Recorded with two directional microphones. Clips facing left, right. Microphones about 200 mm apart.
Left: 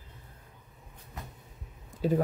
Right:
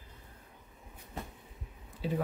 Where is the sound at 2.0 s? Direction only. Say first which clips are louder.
Left 7 dB; 45° left (ahead or behind).